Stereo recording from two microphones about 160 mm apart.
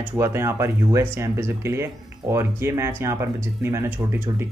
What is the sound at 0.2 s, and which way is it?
Speech, 15° right (ahead or behind).